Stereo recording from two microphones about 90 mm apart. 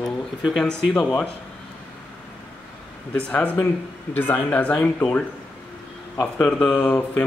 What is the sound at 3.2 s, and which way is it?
Speech, 15° left (ahead or behind).